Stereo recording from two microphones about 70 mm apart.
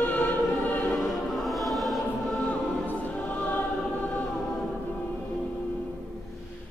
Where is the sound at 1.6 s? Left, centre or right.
Centre.